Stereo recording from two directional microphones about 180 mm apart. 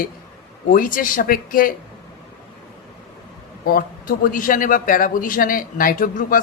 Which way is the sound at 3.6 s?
55° left (ahead or behind).